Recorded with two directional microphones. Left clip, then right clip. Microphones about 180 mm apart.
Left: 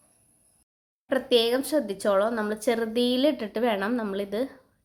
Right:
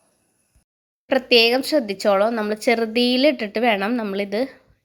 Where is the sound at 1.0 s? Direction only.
20° right (ahead or behind).